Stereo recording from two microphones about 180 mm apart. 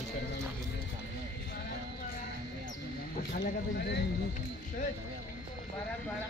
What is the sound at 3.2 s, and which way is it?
Speech, 60° left (ahead or behind).